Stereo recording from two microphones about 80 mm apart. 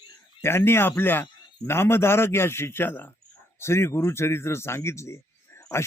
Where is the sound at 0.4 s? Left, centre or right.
Left.